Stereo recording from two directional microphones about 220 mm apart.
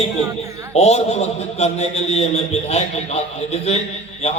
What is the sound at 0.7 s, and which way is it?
A man's voice, 30° left (ahead or behind).